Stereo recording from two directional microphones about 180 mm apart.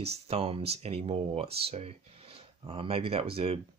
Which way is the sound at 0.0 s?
35° right (ahead or behind).